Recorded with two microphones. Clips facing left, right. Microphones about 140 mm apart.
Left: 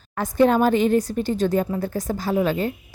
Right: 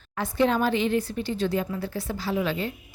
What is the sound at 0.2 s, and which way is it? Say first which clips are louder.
Speech: left 6 dB; 45° left (ahead or behind).